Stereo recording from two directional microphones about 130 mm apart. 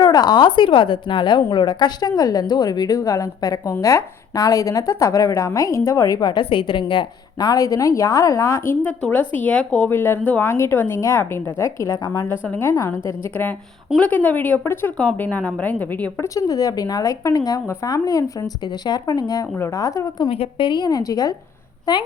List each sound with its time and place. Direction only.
0.0 s a woman's voice: 35° left (ahead or behind); by 16.3 s 10° left (ahead or behind)
16.3 s a woman's voice: 30° left (ahead or behind)
20.2 s a woman's voice: 45° left (ahead or behind); by 22.0 s 25° left (ahead or behind)